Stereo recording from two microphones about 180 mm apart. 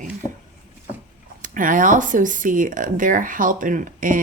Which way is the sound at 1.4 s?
45° right (ahead or behind).